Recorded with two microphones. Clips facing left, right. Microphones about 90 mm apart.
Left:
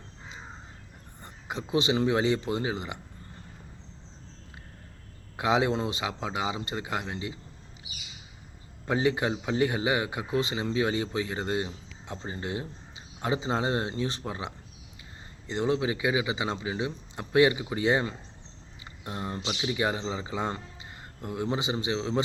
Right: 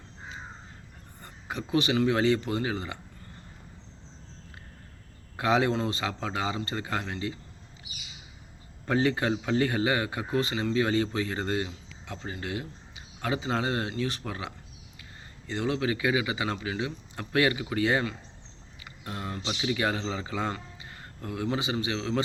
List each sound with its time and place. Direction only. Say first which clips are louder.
1.2 s speech: even; 20° left (ahead or behind)
5.4 s speech: even; 15° left (ahead or behind)
8.9 s speech: right 1 dB; 15° left (ahead or behind)
18.9 s a sound: left 1 dB; 20° left (ahead or behind)
19.5 s speech: right 1 dB; 15° left (ahead or behind)